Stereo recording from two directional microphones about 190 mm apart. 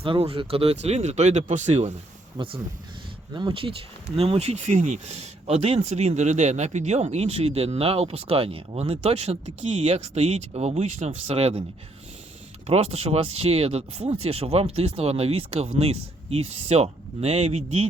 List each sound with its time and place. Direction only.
0.0 s speech: 30° right (ahead or behind)
2.4 s speech: 25° right (ahead or behind)
12.6 s speech: 30° right (ahead or behind)